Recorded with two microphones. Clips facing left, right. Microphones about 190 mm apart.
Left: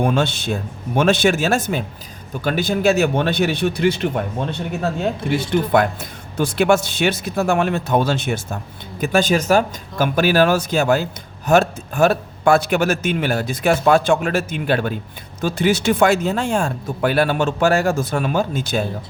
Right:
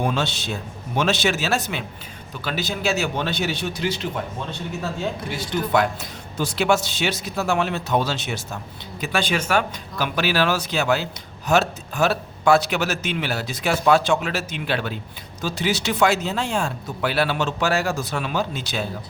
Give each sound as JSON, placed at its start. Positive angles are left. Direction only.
{"t": 0.0, "sound": "speech", "side_deg": 50}
{"t": 5.3, "sound": "speech", "side_deg": 55}
{"t": 9.0, "sound": "speech", "side_deg": 45}